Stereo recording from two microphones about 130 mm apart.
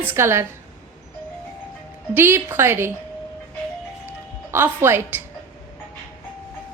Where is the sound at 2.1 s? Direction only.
15° right (ahead or behind).